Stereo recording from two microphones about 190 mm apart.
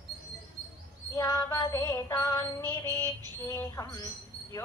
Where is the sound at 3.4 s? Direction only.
15° left (ahead or behind).